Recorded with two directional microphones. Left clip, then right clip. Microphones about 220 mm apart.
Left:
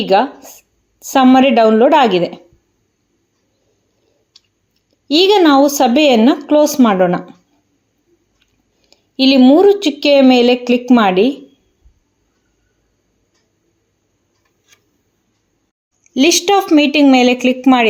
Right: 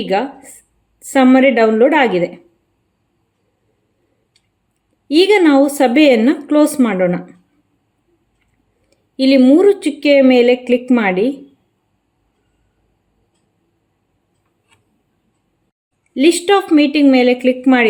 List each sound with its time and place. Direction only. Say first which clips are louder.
0.1 s speech: left 6 dB; 15° left (ahead or behind)
5.0 s speech: left 1 dB; 15° left (ahead or behind)
8.9 s speech: left 1 dB; 15° left (ahead or behind)
16.1 s a woman's voice: left 1 dB; 20° left (ahead or behind)